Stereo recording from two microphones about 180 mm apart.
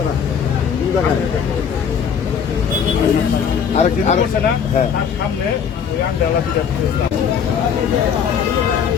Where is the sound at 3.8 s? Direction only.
40° left (ahead or behind).